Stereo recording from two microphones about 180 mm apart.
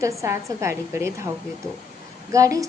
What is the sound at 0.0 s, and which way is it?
A woman's voice, 15° right (ahead or behind).